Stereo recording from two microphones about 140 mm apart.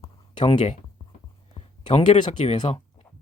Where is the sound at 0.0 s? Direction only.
35° left (ahead or behind).